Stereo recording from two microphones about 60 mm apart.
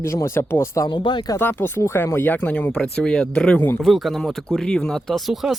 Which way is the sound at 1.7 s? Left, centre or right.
Left.